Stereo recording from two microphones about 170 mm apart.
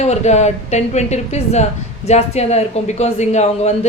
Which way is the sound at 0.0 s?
40° left (ahead or behind).